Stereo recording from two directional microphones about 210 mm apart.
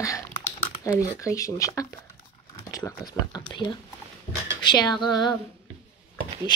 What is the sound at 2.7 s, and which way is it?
Speech, 15° left (ahead or behind).